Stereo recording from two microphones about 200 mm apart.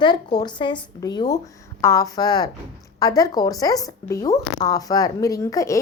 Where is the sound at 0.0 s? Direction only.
20° left (ahead or behind).